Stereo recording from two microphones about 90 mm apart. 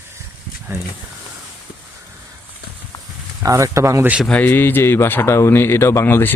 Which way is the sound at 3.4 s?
35° right (ahead or behind).